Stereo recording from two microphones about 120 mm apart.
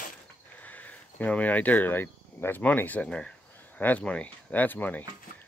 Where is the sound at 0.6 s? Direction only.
15° left (ahead or behind).